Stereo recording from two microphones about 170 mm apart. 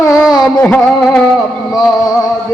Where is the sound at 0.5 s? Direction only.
15° left (ahead or behind).